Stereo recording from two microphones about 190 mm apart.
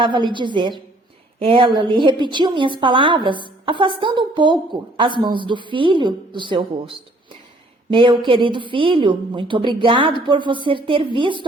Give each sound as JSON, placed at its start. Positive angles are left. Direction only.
{"t": 0.0, "sound": "a woman's voice", "side_deg": -25}
{"t": 7.9, "sound": "a woman's voice", "side_deg": -25}